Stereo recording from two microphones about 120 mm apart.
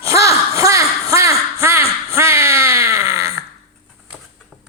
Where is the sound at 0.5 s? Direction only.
25° right (ahead or behind).